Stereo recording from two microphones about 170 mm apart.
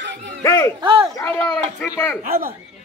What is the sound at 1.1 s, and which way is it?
Speech, 10° left (ahead or behind).